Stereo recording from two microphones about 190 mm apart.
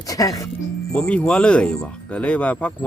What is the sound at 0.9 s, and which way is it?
Speech, 5° left (ahead or behind).